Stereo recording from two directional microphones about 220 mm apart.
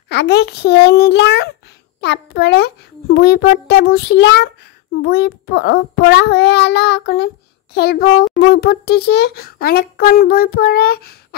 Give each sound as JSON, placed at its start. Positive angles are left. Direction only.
{"t": 0.1, "sound": "a child's voice", "side_deg": 50}